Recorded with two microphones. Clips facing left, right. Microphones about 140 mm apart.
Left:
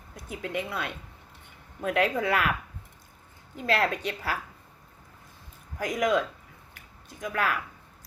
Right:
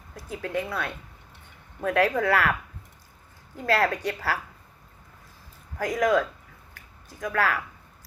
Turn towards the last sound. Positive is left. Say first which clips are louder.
# right 3 dB
turn(degrees=20)  # may be behind; listen again after turning